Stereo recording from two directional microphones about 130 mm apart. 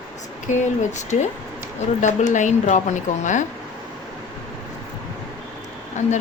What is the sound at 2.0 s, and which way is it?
A woman's voice, 70° left (ahead or behind).